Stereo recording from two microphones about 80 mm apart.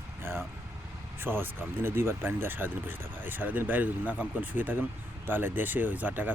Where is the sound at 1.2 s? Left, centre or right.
Right.